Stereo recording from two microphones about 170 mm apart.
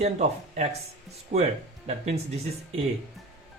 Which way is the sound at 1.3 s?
75° right (ahead or behind).